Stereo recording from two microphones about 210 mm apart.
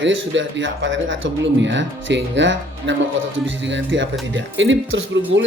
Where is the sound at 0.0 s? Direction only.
60° right (ahead or behind).